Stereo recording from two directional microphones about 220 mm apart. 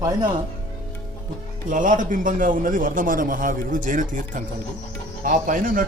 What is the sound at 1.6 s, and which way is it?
A man's voice, 35° right (ahead or behind).